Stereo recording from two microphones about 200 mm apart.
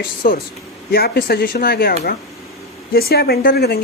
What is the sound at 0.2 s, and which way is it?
Speech, 40° left (ahead or behind).